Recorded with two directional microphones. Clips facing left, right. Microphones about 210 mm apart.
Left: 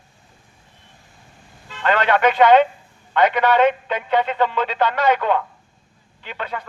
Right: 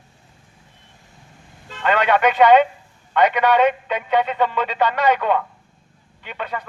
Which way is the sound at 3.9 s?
10° right (ahead or behind).